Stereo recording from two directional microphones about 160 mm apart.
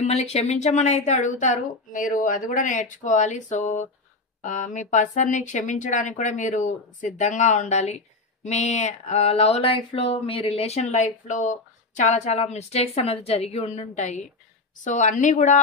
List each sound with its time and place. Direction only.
0.0 s a woman's voice: 45° left (ahead or behind)
8.5 s a sound: 45° left (ahead or behind)
14.8 s a woman's voice: 50° left (ahead or behind)